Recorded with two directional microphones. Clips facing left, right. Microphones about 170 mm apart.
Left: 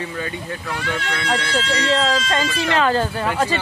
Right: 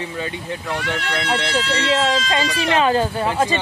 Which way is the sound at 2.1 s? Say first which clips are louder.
Even; 15° right (ahead or behind).